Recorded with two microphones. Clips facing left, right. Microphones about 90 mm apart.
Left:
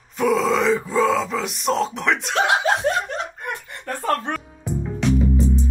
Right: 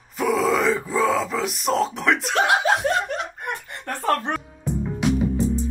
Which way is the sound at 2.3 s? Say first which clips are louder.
Left 1 dB; 25° left (ahead or behind).